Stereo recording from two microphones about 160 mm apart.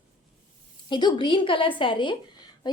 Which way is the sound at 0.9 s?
30° left (ahead or behind).